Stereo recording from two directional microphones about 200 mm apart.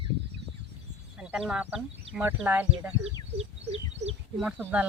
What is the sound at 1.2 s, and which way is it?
Speech, 5° right (ahead or behind).